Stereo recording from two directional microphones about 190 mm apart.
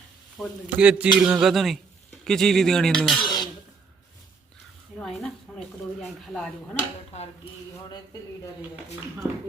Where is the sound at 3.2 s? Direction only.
25° left (ahead or behind).